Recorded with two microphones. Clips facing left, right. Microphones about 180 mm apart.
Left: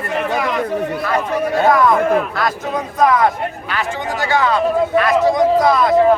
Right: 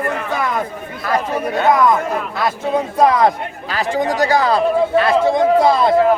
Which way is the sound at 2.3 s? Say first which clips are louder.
Right 2 dB; 25° right (ahead or behind).